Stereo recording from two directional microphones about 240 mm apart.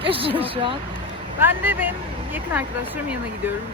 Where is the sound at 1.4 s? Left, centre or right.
Centre.